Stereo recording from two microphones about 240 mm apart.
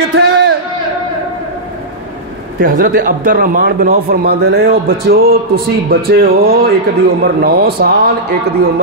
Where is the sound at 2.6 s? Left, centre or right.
Right.